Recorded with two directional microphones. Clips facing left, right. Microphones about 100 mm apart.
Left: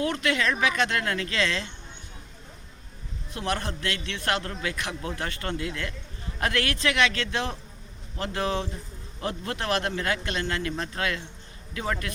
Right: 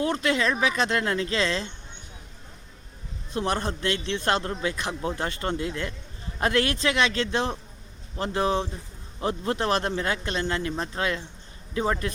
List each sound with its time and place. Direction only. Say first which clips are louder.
0.0 s speech: right 2 dB; 25° right (ahead or behind)
3.3 s speech: right 3 dB; 25° right (ahead or behind)